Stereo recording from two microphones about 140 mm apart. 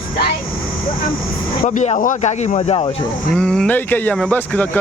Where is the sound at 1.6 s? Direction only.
55° left (ahead or behind).